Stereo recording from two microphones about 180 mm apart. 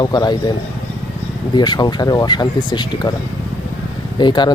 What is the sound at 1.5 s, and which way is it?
Speech, 25° left (ahead or behind).